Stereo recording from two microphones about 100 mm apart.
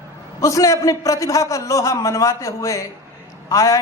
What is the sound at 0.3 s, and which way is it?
A man's voice, 35° left (ahead or behind).